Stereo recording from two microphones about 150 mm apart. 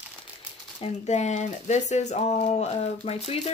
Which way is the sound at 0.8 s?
50° left (ahead or behind).